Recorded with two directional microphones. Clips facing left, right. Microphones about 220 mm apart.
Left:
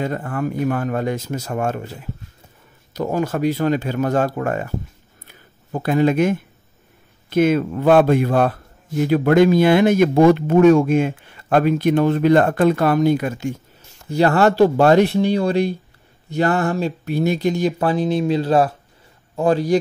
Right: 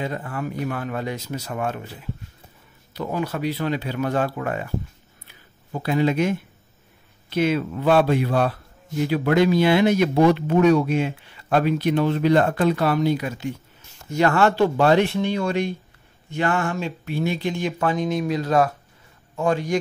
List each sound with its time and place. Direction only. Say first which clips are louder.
0.0 s speech: left 5 dB; 50° left (ahead or behind)
2.9 s speech: left 5 dB; 45° left (ahead or behind)
5.2 s a sound: left 6 dB; 50° left (ahead or behind)
7.2 s speech: left 5 dB; 50° left (ahead or behind)
14.0 s speech: left 3 dB; 35° left (ahead or behind)